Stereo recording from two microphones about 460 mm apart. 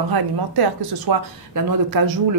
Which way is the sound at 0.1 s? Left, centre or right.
Right.